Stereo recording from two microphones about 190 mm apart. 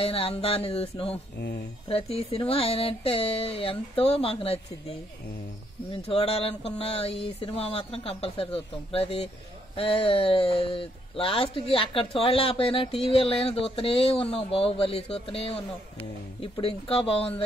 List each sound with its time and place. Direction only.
0.0 s speech: 30° left (ahead or behind)
6.0 s speech: 30° left (ahead or behind)